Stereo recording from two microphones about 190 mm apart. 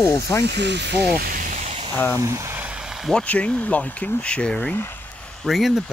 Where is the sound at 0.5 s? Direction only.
65° right (ahead or behind); by 1.9 s 40° right (ahead or behind).